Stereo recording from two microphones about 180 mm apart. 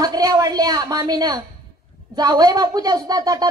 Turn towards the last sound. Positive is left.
turn(degrees=-20)  # may be behind; listen again after turning